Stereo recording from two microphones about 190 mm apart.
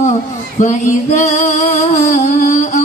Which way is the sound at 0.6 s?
40° left (ahead or behind).